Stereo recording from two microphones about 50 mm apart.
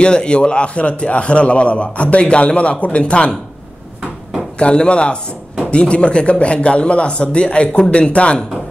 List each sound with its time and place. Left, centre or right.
0.0 s a man's voice: centre
4.6 s a man's voice: left